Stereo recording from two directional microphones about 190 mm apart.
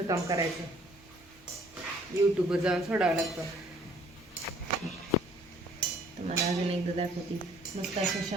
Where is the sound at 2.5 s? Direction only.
5° right (ahead or behind).